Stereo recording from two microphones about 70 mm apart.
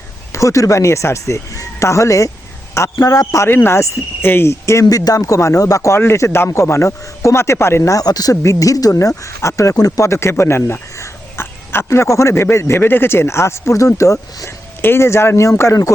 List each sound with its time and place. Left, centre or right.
0.3 s speech: left
3.4 s a man's voice: left
7.9 s speech: left
8.4 s speech: left
14.8 s a man's voice: left